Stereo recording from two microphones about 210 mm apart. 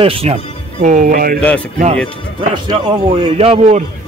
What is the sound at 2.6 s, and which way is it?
A man's voice, 25° right (ahead or behind).